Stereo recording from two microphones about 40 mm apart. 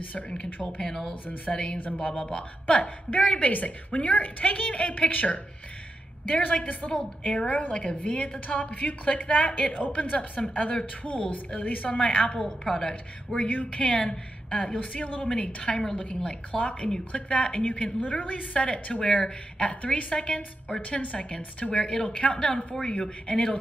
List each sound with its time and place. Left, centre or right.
0.8 s speech: centre
1.2 s a woman's voice: left
1.5 s a woman's voice: left
12.8 s a woman's voice: left
13.5 s a woman's voice: left
17.6 s a woman's voice: left
19.8 s a woman's voice: left